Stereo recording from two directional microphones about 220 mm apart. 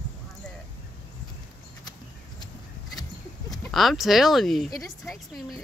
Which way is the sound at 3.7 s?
Centre (ahead or behind).